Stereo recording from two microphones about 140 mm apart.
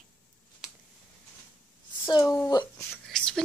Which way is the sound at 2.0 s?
30° left (ahead or behind).